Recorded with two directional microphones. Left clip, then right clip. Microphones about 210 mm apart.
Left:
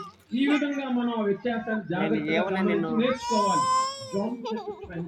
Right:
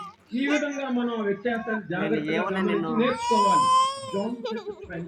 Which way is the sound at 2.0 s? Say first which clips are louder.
Even; 20° right (ahead or behind).